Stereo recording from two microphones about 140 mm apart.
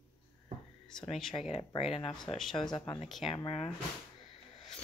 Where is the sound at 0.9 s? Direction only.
5° left (ahead or behind).